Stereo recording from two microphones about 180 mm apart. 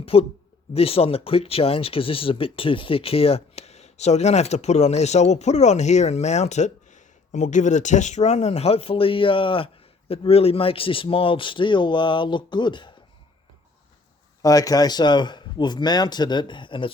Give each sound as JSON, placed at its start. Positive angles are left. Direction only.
{"t": 0.0, "sound": "speech", "side_deg": 30}
{"t": 14.4, "sound": "speech", "side_deg": 20}